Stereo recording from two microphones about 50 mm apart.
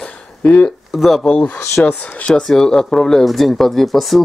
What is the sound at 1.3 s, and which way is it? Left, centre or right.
Speech, left.